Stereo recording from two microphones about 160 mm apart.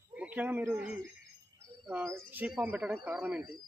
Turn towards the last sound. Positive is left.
turn(degrees=-5)  # may be behind; listen again after turning